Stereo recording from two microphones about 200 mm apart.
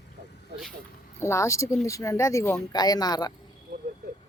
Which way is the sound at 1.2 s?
15° left (ahead or behind).